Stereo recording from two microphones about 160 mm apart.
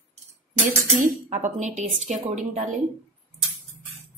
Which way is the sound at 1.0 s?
50° right (ahead or behind).